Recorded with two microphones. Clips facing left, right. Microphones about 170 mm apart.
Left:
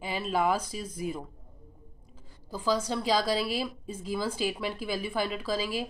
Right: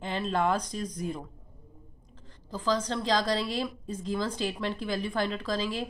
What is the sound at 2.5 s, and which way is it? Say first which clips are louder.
Speech: even; 10° left (ahead or behind).